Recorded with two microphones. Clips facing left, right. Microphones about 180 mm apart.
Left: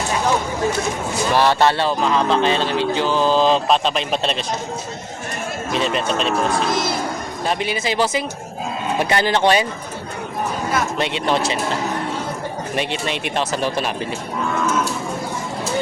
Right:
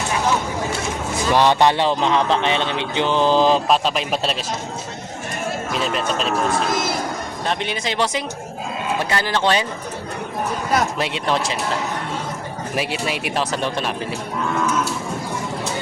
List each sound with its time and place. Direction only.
1.3 s speech: 15° right (ahead or behind)
5.7 s speech: centre (ahead or behind)
7.4 s speech: 5° left (ahead or behind)
9.0 s speech: 20° left (ahead or behind)
10.9 s speech: centre (ahead or behind)
12.7 s speech: 5° right (ahead or behind)